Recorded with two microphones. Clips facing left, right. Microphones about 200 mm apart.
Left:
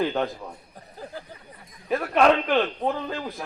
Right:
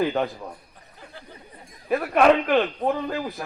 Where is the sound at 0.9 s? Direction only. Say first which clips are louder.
Left 7 dB; 35° left (ahead or behind).